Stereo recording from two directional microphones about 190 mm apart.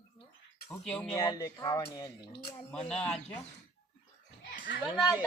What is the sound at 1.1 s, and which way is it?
Speech, 20° left (ahead or behind).